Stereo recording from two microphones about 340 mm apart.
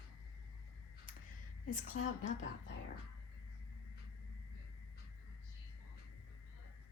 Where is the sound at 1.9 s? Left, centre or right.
Left.